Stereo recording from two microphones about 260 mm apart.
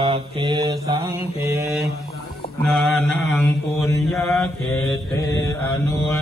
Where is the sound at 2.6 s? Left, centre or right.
Centre.